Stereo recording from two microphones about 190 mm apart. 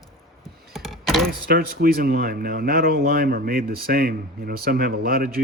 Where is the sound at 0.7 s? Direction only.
Centre (ahead or behind).